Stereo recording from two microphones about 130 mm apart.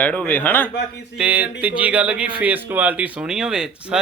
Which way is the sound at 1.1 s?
10° right (ahead or behind).